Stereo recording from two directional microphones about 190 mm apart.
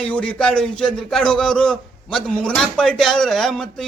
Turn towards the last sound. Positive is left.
turn(degrees=0)  # may be behind; listen again after turning